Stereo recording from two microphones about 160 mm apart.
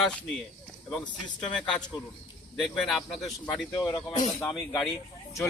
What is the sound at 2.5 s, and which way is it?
Speech, centre (ahead or behind).